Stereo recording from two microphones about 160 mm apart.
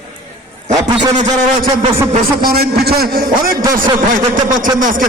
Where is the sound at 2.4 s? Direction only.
70° right (ahead or behind).